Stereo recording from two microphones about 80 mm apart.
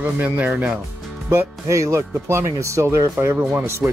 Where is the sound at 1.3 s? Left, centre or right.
Right.